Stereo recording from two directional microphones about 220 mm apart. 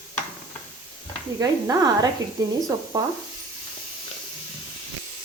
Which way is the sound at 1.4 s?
15° right (ahead or behind).